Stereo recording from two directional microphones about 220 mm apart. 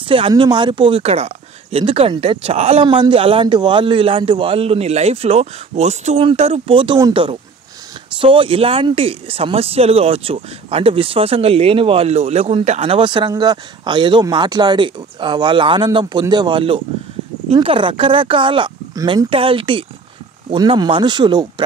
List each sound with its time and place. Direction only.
0.1 s speech: 20° right (ahead or behind)